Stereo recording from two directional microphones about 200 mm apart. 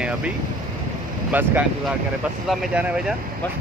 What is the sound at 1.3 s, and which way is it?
Speech, 10° right (ahead or behind).